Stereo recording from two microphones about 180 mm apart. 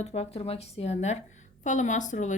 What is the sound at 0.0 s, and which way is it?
Speech, 35° left (ahead or behind).